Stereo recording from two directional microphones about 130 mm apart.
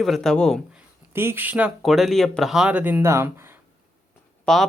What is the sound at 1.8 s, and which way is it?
Speech, centre (ahead or behind).